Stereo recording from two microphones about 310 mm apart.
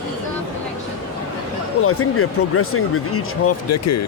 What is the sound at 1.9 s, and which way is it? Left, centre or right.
Speech, left.